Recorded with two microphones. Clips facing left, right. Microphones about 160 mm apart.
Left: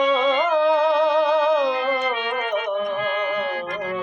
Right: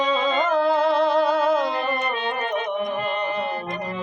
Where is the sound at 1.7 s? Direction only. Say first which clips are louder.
Left 3 dB; 35° right (ahead or behind).